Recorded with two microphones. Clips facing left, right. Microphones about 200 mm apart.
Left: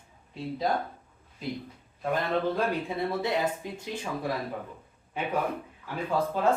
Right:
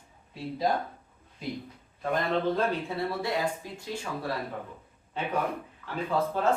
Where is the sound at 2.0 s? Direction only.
10° left (ahead or behind).